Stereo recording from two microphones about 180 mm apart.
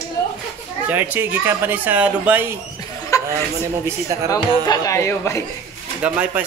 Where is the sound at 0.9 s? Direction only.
10° right (ahead or behind).